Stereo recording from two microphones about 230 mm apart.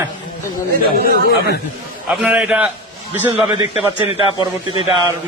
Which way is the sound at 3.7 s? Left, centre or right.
Left.